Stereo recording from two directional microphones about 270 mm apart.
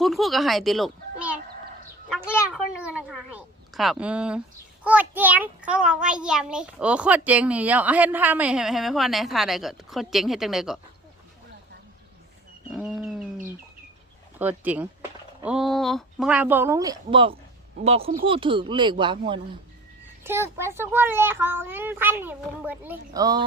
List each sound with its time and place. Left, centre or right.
0.0 s a woman's voice: centre
12.7 s roaring cats: centre
14.3 s a child's voice: centre